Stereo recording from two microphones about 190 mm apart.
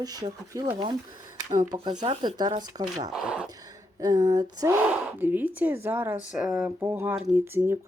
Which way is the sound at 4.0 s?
20° right (ahead or behind).